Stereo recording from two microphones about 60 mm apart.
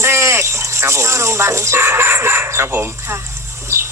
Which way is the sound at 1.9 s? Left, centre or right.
Right.